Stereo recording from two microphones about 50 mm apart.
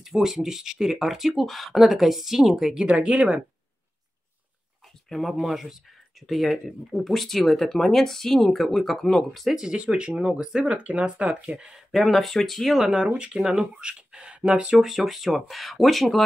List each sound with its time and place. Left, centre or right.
0.0 s speech: centre
2.8 s speech: centre
5.1 s speech: centre
9.6 s speech: centre
11.9 s speech: centre
13.1 s speech: right; by 16.2 s centre